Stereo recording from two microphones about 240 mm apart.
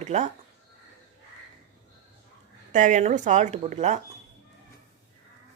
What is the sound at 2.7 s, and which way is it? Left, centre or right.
Speech, right.